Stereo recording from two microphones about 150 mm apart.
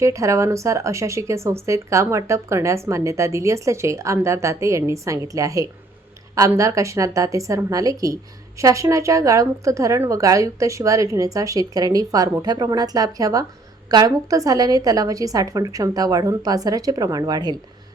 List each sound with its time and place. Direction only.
0.0 s a woman's voice: 20° right (ahead or behind)